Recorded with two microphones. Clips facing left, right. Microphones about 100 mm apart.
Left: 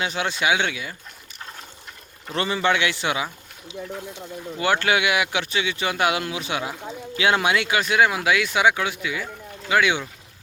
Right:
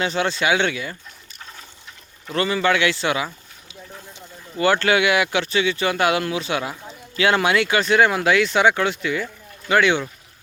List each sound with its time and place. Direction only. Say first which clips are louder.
0.0 s speech: right 3 dB; 10° left (ahead or behind)
2.3 s a man's voice: right 2 dB; 25° left (ahead or behind); by 10.0 s 5° left (ahead or behind)